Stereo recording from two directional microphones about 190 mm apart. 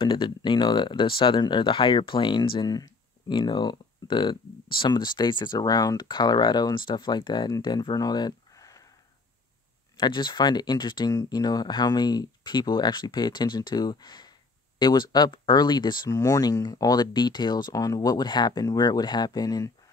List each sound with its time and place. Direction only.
0.0 s speech: 25° left (ahead or behind)
9.9 s speech: 25° left (ahead or behind)